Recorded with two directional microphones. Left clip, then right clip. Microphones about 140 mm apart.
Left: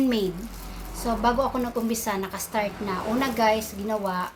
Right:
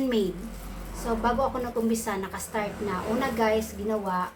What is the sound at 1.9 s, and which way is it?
A woman's voice, 35° left (ahead or behind).